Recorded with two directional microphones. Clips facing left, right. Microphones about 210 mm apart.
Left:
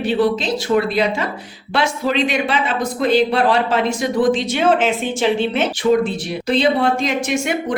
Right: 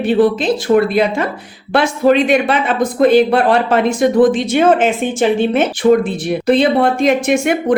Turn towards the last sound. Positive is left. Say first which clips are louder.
# right 6 dB
turn(degrees=-55)  # may be behind; listen again after turning